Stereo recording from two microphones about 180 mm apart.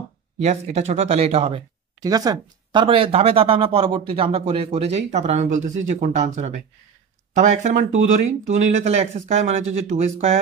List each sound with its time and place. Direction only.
0.4 s speech: 40° right (ahead or behind)
2.0 s speech: 20° right (ahead or behind); by 10.4 s 40° right (ahead or behind)